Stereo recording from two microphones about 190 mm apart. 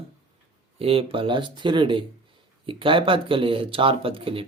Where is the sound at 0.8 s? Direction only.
30° right (ahead or behind).